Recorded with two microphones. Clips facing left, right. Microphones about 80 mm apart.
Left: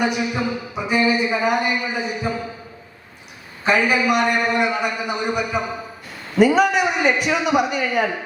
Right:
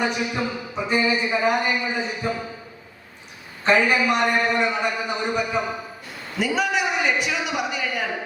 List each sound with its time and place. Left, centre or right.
0.0 s speech: centre
3.6 s speech: centre
6.4 s a man's voice: left